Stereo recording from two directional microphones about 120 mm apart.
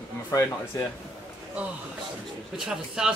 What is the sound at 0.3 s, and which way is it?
Speech, 25° left (ahead or behind).